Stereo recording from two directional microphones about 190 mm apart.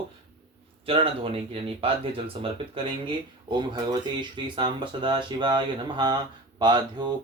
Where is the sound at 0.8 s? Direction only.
30° right (ahead or behind).